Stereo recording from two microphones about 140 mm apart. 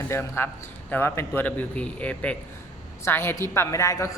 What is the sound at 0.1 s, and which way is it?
A man's voice, 15° left (ahead or behind).